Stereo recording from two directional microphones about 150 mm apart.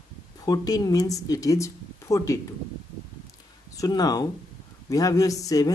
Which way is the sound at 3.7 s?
25° left (ahead or behind).